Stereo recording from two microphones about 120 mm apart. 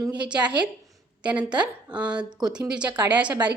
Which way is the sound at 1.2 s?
10° right (ahead or behind).